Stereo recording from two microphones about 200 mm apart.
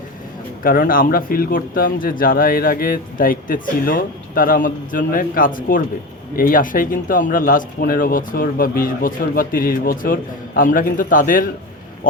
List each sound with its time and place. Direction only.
0.6 s a man's voice: 45° left (ahead or behind)